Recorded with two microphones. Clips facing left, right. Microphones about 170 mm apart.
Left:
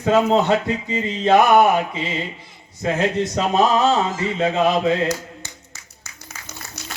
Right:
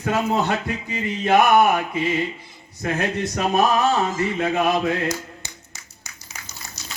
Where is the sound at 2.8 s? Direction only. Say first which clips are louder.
Left 4 dB; 25° left (ahead or behind).